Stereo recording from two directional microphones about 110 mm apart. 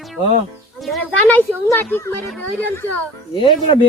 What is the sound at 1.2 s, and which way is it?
A woman's voice, 15° left (ahead or behind).